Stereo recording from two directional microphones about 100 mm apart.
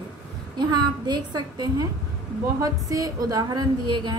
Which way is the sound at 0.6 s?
45° right (ahead or behind).